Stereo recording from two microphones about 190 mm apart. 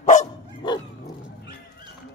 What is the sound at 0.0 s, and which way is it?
Dog, 40° left (ahead or behind).